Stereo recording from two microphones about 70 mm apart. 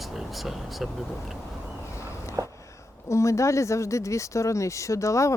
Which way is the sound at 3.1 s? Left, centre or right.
Left.